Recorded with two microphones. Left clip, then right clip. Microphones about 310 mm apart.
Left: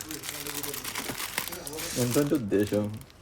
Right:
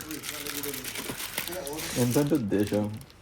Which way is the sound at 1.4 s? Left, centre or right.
Centre.